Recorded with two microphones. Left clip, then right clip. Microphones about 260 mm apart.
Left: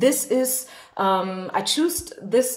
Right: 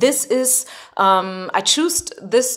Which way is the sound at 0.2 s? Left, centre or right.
Right.